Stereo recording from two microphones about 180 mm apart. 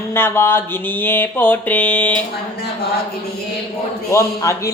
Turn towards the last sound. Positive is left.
turn(degrees=15)  # may be behind; listen again after turning